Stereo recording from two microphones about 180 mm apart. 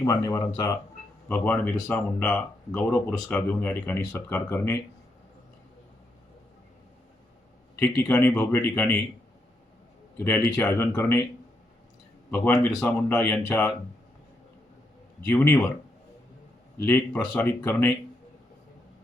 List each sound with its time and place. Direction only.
0.0 s speech: 15° left (ahead or behind)
7.8 s speech: 10° left (ahead or behind)
10.2 s speech: 10° left (ahead or behind)
12.3 s speech: 10° left (ahead or behind)
15.3 s speech: 5° left (ahead or behind)
16.8 s speech: 10° left (ahead or behind)